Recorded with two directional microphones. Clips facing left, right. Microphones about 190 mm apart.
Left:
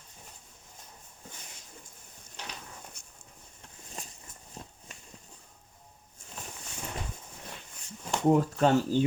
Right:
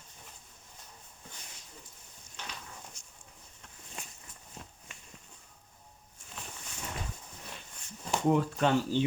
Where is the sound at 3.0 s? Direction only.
60° left (ahead or behind).